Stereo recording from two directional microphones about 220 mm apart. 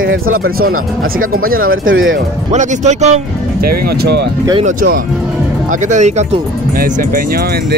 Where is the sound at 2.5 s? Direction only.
30° right (ahead or behind).